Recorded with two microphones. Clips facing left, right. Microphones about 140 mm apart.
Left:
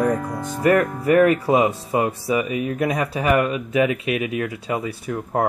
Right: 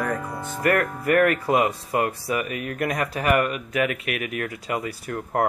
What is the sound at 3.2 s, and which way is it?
Speech, 20° left (ahead or behind).